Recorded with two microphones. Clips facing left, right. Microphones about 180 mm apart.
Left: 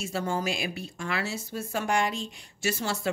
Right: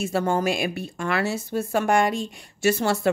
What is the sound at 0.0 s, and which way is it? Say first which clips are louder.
A woman's voice: right 7 dB; 60° right (ahead or behind).